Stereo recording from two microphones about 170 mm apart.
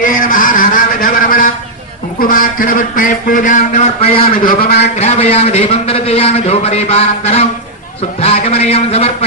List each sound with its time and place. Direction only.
0.0 s a sound: 55° left (ahead or behind)
2.1 s speech: 55° left (ahead or behind); by 4.2 s 40° left (ahead or behind)
4.4 s a man's voice: 65° left (ahead or behind)
4.9 s a man's voice: 40° left (ahead or behind)